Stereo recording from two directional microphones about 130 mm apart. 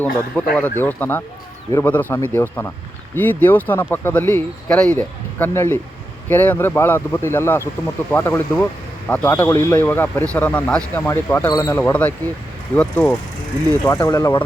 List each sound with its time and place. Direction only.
0.0 s speech: 10° left (ahead or behind)
13.8 s speech: 25° left (ahead or behind)